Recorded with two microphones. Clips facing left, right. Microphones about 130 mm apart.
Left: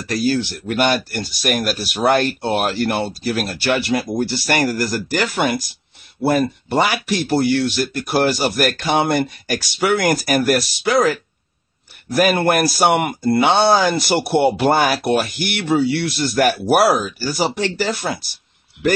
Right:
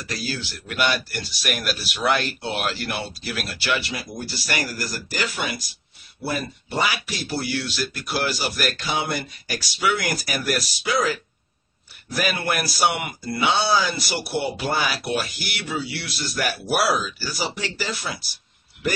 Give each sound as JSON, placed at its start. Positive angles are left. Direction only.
{"t": 0.1, "sound": "speech", "side_deg": 55}